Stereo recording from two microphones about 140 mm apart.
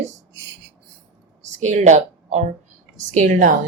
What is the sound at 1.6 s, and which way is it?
Speech, 55° right (ahead or behind).